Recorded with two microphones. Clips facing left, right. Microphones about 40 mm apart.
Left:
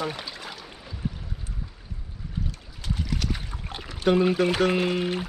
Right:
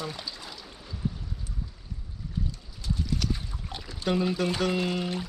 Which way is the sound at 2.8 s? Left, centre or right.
Left.